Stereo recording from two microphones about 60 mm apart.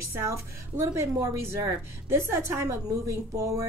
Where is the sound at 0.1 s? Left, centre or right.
Right.